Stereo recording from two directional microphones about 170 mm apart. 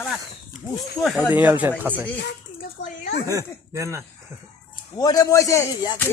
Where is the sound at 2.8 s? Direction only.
90° left.